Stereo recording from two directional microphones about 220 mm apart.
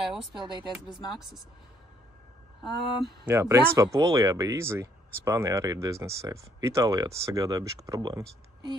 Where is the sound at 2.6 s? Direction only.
Centre (ahead or behind).